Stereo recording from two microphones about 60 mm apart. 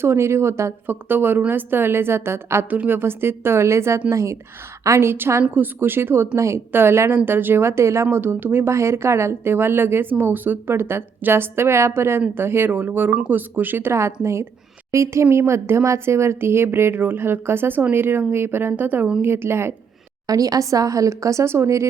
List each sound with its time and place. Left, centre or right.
0.0 s speech: right
0.9 s a woman's voice: right
2.6 s a woman's voice: right
6.3 s speech: right
6.7 s a woman's voice: right
8.7 s a woman's voice: right
19.2 s speech: right
20.2 s a woman's voice: right